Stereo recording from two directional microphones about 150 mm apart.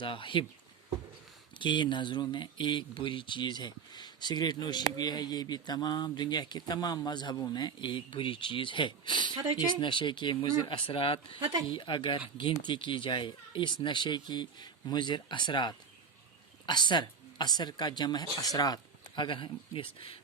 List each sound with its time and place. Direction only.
0.0 s speech: 35° left (ahead or behind)
1.5 s speech: 30° left (ahead or behind)